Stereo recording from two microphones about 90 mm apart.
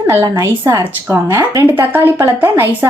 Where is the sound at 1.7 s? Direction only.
25° right (ahead or behind).